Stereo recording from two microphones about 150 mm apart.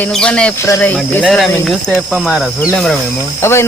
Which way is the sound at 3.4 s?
15° left (ahead or behind).